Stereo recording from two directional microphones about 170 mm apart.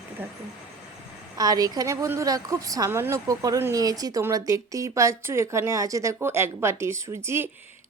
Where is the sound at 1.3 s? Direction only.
20° right (ahead or behind).